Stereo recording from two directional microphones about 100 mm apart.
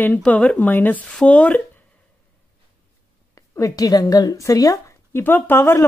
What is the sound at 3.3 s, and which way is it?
Speech, 35° left (ahead or behind).